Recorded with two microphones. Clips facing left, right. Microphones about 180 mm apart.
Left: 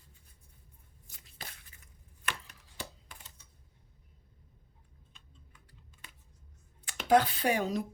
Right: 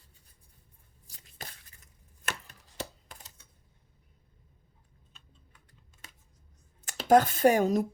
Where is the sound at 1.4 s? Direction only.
45° right (ahead or behind).